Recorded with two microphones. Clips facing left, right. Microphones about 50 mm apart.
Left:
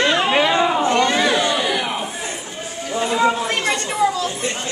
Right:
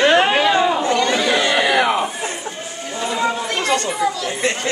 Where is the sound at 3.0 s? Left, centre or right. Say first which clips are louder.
Left 3 dB; centre.